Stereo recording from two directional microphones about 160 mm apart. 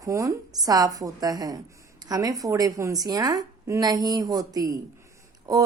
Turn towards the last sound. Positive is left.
turn(degrees=-25)  # may be behind; listen again after turning